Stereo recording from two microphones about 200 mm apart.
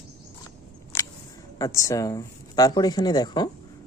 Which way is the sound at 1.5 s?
15° left (ahead or behind).